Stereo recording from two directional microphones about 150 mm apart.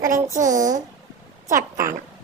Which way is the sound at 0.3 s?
60° right (ahead or behind).